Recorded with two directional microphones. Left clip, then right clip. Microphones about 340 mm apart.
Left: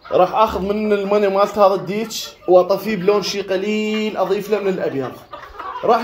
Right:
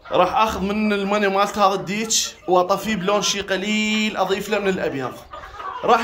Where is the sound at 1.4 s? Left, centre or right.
Centre.